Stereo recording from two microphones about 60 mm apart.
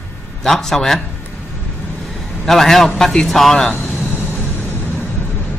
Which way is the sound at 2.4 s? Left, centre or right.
Centre.